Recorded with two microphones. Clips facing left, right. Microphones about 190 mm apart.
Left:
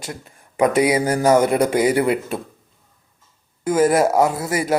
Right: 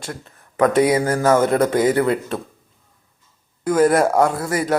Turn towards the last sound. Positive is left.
turn(degrees=5)  # may be behind; listen again after turning